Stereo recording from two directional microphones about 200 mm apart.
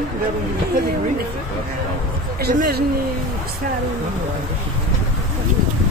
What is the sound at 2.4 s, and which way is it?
Speech, 50° right (ahead or behind).